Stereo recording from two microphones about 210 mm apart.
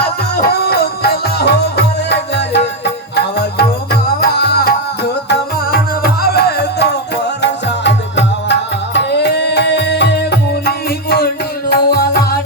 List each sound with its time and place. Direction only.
0.6 s music: 45° left (ahead or behind)